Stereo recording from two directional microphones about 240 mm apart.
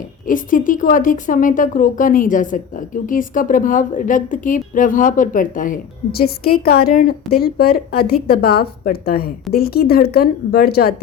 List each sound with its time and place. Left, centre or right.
0.3 s a woman's voice: left